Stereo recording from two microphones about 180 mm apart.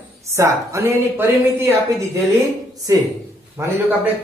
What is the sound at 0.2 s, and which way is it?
A woman's voice, 15° right (ahead or behind).